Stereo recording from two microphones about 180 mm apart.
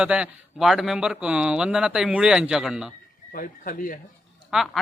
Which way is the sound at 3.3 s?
50° left (ahead or behind).